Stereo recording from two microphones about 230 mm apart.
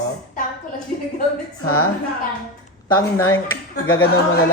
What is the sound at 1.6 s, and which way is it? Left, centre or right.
Speech, left.